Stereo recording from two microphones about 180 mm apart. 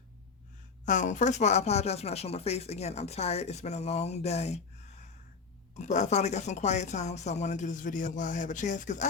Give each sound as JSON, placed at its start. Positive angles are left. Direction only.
{"t": 0.9, "sound": "speech", "side_deg": 45}